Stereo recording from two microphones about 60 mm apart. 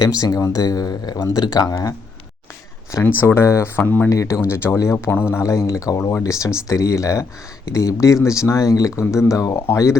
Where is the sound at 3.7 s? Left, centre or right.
Left.